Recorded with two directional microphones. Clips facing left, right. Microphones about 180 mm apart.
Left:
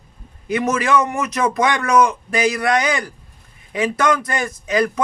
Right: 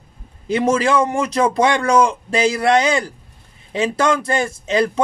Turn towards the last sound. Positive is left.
turn(degrees=-25)  # may be behind; listen again after turning